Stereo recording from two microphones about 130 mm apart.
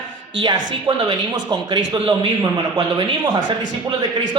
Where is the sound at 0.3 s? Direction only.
35° right (ahead or behind).